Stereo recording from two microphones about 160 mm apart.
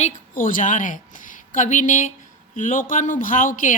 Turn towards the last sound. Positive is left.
turn(degrees=55)  # may be behind; listen again after turning